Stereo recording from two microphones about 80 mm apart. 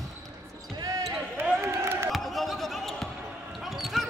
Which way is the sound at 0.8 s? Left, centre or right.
Right.